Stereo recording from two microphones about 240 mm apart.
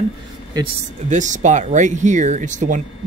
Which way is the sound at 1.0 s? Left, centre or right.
Right.